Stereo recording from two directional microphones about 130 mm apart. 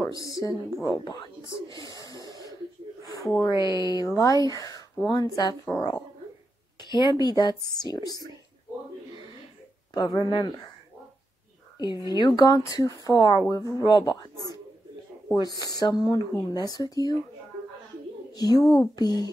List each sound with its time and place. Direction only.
0.0 s speech: 25° left (ahead or behind)
3.4 s speech: 35° left (ahead or behind)
9.9 s speech: 30° left (ahead or behind)
11.8 s speech: 35° left (ahead or behind)
18.3 s speech: 30° left (ahead or behind)